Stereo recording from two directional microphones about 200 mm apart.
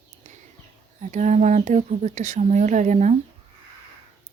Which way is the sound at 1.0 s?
35° right (ahead or behind).